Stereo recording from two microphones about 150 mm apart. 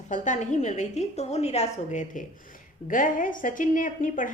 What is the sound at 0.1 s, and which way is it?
A woman's voice, 55° left (ahead or behind).